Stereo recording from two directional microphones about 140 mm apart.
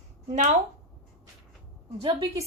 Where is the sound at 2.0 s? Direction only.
40° right (ahead or behind).